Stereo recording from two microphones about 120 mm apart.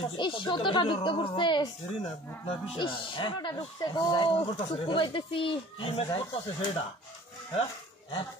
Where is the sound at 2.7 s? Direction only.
45° left (ahead or behind).